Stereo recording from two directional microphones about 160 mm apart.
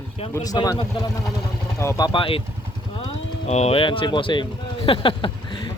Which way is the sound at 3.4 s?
40° left (ahead or behind).